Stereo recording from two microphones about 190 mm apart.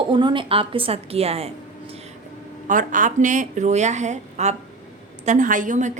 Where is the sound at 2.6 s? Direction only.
45° right (ahead or behind).